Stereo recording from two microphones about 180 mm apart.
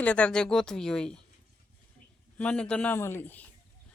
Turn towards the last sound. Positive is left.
turn(degrees=10)  # may be behind; listen again after turning